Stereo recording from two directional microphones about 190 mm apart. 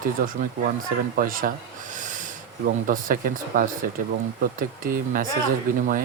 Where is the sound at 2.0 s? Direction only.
40° right (ahead or behind).